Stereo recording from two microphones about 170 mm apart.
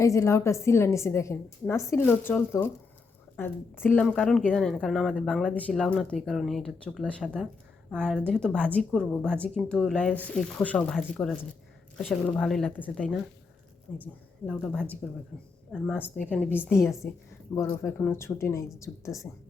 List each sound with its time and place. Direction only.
0.0 s a woman's voice: 20° left (ahead or behind); by 15.5 s centre (ahead or behind)
15.9 s a woman's voice: 10° left (ahead or behind)